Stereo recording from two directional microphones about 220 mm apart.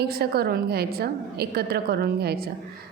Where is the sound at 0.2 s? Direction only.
45° right (ahead or behind).